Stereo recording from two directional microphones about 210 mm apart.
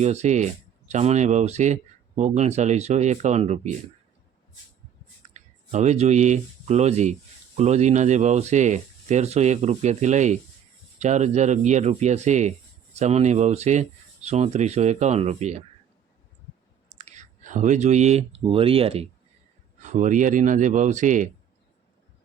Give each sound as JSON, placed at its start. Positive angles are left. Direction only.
{"t": 0.0, "sound": "speech", "side_deg": -30}
{"t": 5.3, "sound": "speech", "side_deg": -35}
{"t": 17.0, "sound": "speech", "side_deg": -35}